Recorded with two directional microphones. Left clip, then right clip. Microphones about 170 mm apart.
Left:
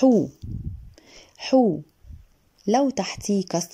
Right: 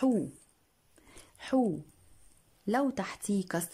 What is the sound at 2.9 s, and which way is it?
Speech, 5° left (ahead or behind).